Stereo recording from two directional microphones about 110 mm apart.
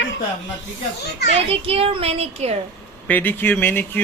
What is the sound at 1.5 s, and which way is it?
Speech, 60° right (ahead or behind).